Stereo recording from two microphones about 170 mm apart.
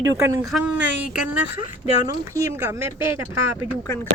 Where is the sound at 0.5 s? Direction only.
10° right (ahead or behind).